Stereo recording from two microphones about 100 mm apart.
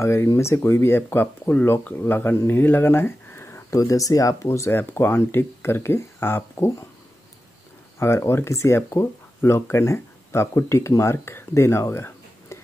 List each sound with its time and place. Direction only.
0.0 s speech: 25° left (ahead or behind)
8.0 s speech: 25° left (ahead or behind)